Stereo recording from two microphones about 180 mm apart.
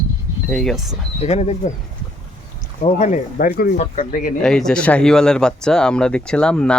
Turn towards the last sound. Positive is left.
turn(degrees=5)  # may be behind; listen again after turning